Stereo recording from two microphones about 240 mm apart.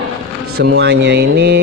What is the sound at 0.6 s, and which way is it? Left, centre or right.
Speech, right.